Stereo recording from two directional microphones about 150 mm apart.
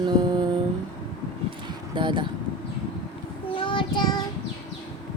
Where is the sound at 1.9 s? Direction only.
30° right (ahead or behind).